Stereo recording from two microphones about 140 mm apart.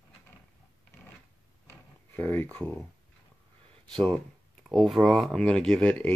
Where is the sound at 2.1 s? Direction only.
15° left (ahead or behind).